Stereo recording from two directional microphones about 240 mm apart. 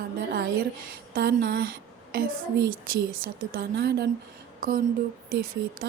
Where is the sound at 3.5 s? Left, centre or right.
Right.